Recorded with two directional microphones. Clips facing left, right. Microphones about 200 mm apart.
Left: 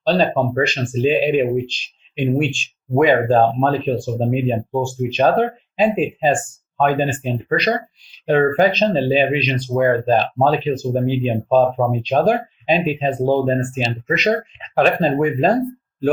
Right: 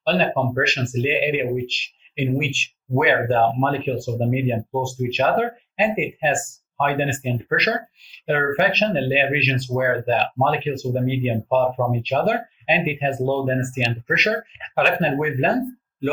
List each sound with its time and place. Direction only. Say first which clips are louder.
0.0 s speech: left 3 dB; 35° left (ahead or behind)